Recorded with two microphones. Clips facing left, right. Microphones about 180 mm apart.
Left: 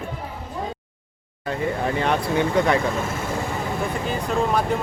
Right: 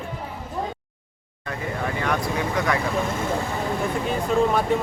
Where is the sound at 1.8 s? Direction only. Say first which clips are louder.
Left 1 dB; 25° left (ahead or behind).